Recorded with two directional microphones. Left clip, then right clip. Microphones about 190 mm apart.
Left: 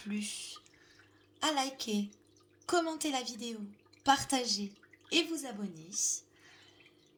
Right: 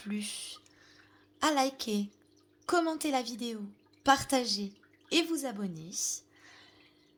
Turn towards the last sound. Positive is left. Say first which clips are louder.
# even
turn(degrees=-50)  # may be behind; listen again after turning